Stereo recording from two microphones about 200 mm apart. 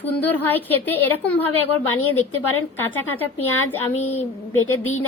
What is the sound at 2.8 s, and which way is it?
Speech, 10° left (ahead or behind).